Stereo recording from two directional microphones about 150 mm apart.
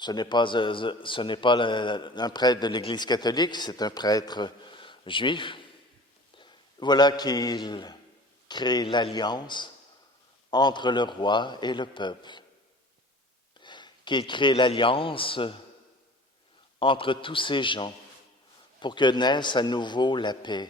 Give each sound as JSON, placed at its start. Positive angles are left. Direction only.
{"t": 0.0, "sound": "a man's voice", "side_deg": 30}
{"t": 13.6, "sound": "speech", "side_deg": 30}
{"t": 16.8, "sound": "a man's voice", "side_deg": 35}